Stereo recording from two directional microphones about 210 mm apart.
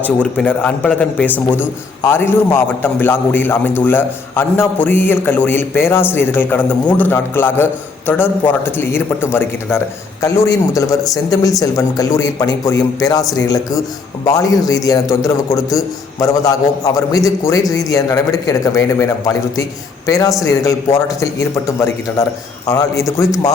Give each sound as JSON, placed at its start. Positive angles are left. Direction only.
{"t": 0.0, "sound": "a man's voice", "side_deg": 5}
{"t": 1.5, "sound": "a man's voice", "side_deg": 15}
{"t": 16.2, "sound": "a man's voice", "side_deg": 15}